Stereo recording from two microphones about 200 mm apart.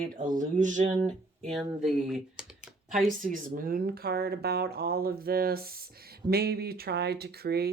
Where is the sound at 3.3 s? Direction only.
45° right (ahead or behind).